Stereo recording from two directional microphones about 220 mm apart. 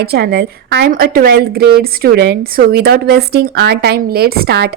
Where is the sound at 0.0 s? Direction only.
45° right (ahead or behind).